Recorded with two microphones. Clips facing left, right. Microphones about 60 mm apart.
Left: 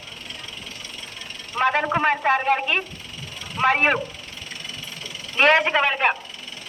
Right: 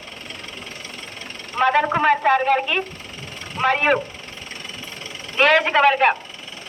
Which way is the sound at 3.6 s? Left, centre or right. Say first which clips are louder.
Right 1 dB; left.